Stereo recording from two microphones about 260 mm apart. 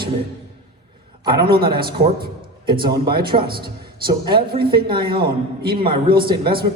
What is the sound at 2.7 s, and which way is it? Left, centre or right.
Speech, centre.